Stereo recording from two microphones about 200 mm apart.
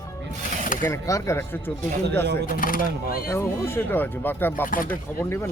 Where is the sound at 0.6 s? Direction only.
40° left (ahead or behind).